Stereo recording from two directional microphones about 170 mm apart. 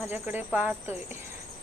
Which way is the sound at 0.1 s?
10° right (ahead or behind).